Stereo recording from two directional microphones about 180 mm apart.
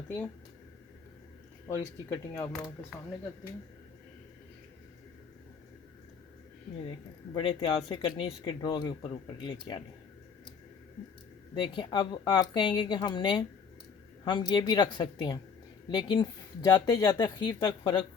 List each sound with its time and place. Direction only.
1.6 s speech: 15° left (ahead or behind)
7.3 s speech: 30° left (ahead or behind)
11.5 s speech: 25° left (ahead or behind)